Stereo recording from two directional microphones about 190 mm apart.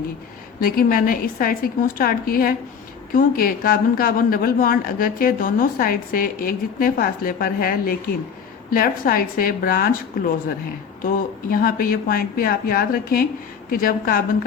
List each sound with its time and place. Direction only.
0.6 s a woman's voice: 50° left (ahead or behind)
11.0 s a woman's voice: 50° left (ahead or behind)